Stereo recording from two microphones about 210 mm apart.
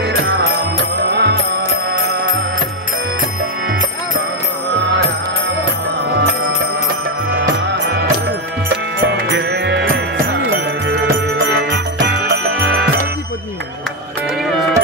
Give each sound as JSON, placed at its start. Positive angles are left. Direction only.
{"t": 0.4, "sound": "music", "side_deg": -50}
{"t": 7.6, "sound": "music", "side_deg": -55}